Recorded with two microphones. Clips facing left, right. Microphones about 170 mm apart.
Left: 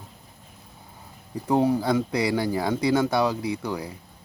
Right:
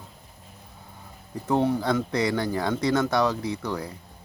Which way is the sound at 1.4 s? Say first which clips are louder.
Left 2 dB; 10° left (ahead or behind).